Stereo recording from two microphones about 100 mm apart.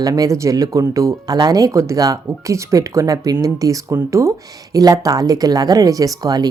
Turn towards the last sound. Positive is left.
turn(degrees=-40)  # may be behind; listen again after turning